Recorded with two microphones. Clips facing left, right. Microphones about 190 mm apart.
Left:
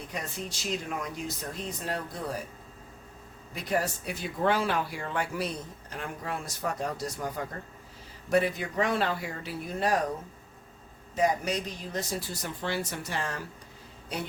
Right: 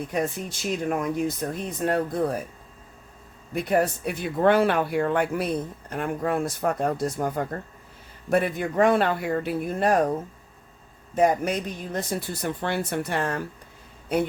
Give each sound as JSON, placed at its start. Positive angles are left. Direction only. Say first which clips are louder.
{"t": 0.1, "sound": "speech", "louder": "right 8 dB", "side_deg": -55}
{"t": 3.5, "sound": "speech", "louder": "right 7 dB", "side_deg": -55}